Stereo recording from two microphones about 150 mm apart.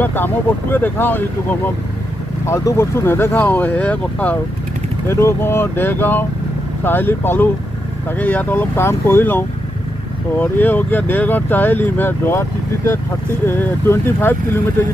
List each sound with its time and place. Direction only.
0.0 s speech: 15° left (ahead or behind)
2.4 s speech: 20° left (ahead or behind)